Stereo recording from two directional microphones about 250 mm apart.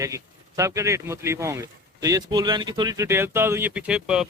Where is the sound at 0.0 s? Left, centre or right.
Centre.